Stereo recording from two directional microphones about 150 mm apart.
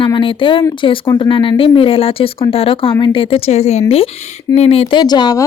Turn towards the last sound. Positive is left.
turn(degrees=25)  # may be behind; listen again after turning